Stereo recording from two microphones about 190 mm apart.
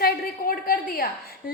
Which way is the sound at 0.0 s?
50° left (ahead or behind).